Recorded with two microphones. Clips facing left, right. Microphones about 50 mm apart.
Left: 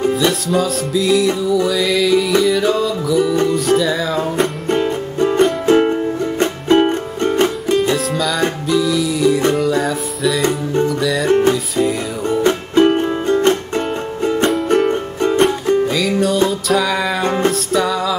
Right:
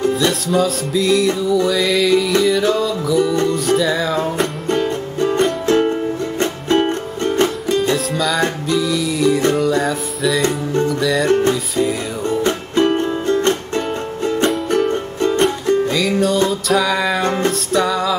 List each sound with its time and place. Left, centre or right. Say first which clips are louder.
0.1 s music: left 1 dB; centre
4.7 s music: left 2 dB; centre
7.4 s music: left 2 dB; centre
10.4 s music: left 1 dB; centre
10.9 s music: right 2 dB; centre
12.3 s music: left 3 dB; centre
14.8 s music: left 1 dB; centre
15.3 s music: left 2 dB; centre
17.2 s music: left 1 dB; centre
17.5 s music: even; centre